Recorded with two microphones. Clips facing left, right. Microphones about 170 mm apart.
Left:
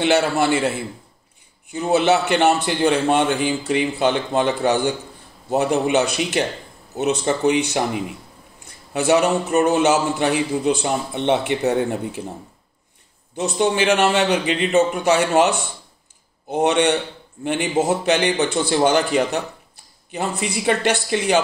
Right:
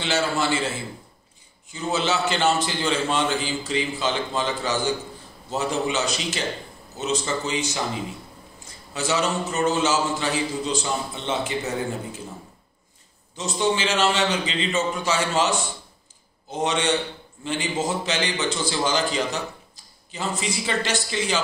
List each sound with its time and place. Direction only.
0.0 s a man's voice: 60° left (ahead or behind)
13.4 s a man's voice: 60° left (ahead or behind)